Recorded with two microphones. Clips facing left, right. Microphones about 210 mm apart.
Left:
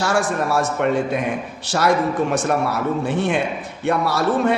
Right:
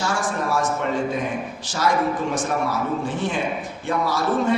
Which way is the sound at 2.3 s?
65° left (ahead or behind).